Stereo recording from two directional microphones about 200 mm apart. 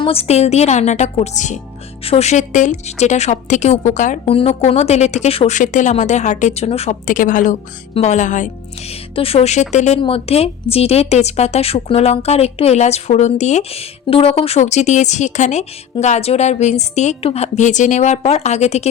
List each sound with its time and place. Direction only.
0.0 s a woman's voice: 30° left (ahead or behind)